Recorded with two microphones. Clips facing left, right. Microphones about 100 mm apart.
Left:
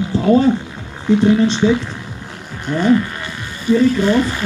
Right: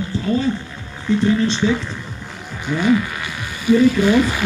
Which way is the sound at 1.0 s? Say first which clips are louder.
Left 4 dB; 15° left (ahead or behind).